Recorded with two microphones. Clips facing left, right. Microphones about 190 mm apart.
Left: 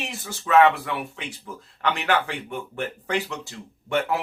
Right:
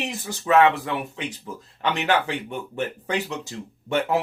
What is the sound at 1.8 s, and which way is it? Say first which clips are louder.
A man's voice: right 1 dB; 20° right (ahead or behind).